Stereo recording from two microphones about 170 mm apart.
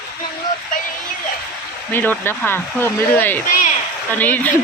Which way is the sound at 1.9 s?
15° left (ahead or behind).